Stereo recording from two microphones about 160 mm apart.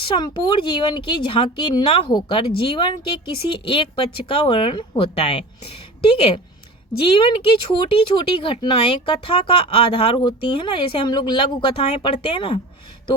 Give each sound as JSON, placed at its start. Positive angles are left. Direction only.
{"t": 0.0, "sound": "speech", "side_deg": 30}
{"t": 7.0, "sound": "speech", "side_deg": 35}